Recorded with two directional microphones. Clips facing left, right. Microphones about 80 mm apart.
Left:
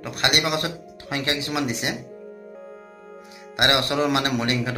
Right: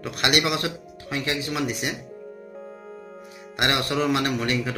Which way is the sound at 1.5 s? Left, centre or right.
Left.